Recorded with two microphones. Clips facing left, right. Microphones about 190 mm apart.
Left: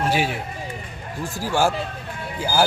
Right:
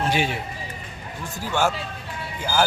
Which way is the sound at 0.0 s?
5° left (ahead or behind).